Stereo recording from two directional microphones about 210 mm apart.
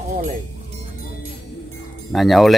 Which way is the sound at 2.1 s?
Centre (ahead or behind).